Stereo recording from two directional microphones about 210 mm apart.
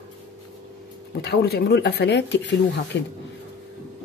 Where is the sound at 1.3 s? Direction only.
50° left (ahead or behind).